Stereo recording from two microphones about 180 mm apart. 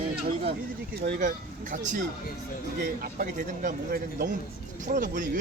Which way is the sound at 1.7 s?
45° right (ahead or behind).